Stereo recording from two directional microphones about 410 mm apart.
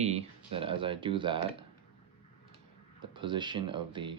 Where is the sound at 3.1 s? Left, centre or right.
Centre.